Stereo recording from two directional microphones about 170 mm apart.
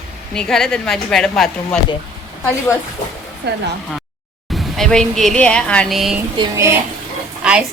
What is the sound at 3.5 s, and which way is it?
Speech, 75° right (ahead or behind).